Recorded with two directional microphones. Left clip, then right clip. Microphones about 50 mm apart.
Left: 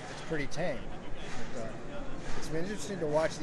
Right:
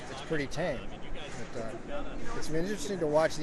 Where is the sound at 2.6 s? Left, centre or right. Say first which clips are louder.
Right 4 dB; right.